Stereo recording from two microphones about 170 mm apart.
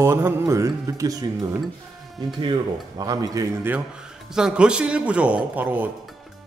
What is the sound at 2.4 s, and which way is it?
Speech, 25° right (ahead or behind).